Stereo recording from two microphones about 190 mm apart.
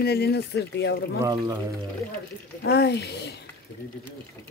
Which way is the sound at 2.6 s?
60° left (ahead or behind).